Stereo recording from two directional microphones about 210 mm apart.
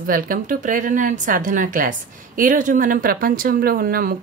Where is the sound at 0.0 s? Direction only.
40° right (ahead or behind).